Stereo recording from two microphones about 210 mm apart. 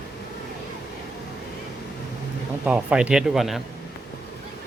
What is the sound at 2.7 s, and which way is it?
Speech, 5° right (ahead or behind).